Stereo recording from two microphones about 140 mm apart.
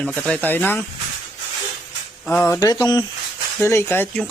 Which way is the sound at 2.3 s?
20° left (ahead or behind).